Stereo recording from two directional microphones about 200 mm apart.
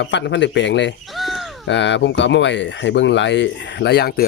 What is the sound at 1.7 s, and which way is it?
Speech, 65° left (ahead or behind).